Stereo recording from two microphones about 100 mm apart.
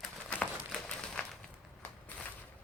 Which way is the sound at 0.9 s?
5° left (ahead or behind).